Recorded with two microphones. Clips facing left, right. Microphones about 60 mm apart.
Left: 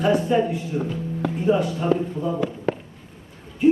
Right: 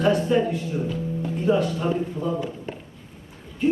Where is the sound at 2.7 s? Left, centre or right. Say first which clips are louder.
Left 10 dB; left.